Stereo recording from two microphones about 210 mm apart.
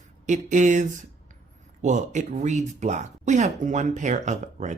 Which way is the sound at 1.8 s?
35° right (ahead or behind).